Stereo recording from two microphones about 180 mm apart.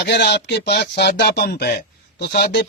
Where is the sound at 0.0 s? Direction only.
65° left (ahead or behind).